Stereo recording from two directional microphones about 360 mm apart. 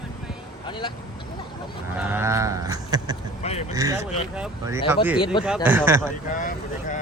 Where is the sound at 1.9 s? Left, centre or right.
Centre.